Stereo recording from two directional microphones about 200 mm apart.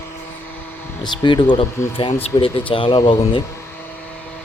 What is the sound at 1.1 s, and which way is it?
Speech, 20° left (ahead or behind).